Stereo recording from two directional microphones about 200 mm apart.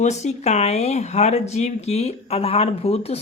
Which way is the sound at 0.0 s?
35° left (ahead or behind).